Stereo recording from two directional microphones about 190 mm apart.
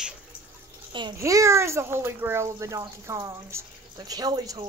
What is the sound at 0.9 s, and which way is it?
A child's voice, 25° right (ahead or behind).